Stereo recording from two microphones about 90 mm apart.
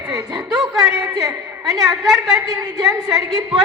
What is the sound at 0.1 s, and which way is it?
Speech, 45° right (ahead or behind).